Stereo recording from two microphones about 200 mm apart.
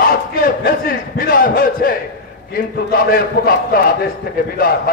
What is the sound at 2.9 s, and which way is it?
A man's voice, 50° left (ahead or behind).